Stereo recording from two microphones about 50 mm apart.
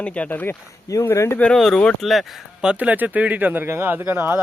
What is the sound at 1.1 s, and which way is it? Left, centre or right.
Speech, left.